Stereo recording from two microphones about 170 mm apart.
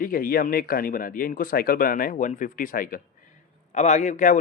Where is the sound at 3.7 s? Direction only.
45° left (ahead or behind).